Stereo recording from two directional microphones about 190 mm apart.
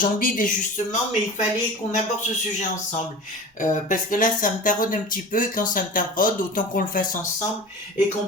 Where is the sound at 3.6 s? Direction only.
45° left (ahead or behind).